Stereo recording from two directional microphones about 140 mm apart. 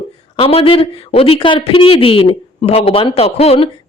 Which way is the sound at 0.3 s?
40° left (ahead or behind).